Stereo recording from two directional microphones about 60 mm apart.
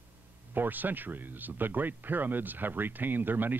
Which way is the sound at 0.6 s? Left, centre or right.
Right.